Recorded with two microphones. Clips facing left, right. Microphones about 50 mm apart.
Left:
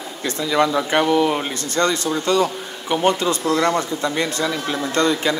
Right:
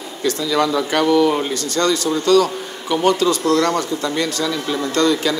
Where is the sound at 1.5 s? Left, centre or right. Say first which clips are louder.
Right 2 dB; left.